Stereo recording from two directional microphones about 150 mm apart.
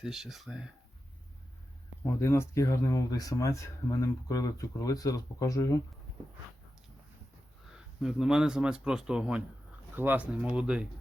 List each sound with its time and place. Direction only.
0.0 s speech: 5° right (ahead or behind)
2.2 s speech: 20° left (ahead or behind)
8.0 s speech: 5° right (ahead or behind)